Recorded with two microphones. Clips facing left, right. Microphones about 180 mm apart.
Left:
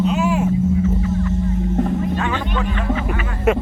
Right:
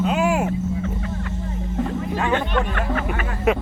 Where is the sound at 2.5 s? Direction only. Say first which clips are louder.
Left 1 dB; 55° right (ahead or behind).